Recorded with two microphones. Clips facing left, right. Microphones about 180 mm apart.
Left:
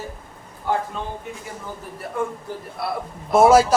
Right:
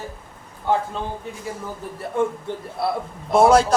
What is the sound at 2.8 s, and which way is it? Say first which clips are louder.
Speech: right 4 dB; 25° right (ahead or behind).